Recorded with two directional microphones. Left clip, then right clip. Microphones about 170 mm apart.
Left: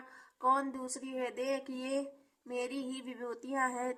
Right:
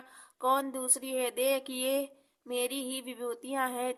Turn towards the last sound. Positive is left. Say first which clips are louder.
# right 2 dB
turn(degrees=-20)  # may be behind; listen again after turning